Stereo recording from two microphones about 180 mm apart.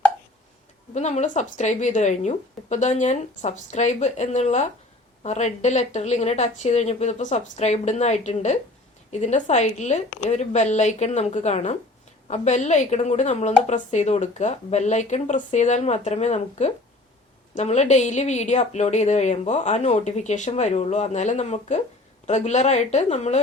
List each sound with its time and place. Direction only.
0.9 s a woman's voice: 40° left (ahead or behind)